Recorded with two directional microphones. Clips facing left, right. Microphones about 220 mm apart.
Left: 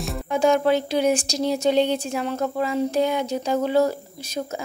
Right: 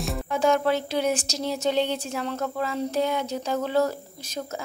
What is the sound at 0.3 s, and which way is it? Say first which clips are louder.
Speech: left 4 dB; 15° left (ahead or behind).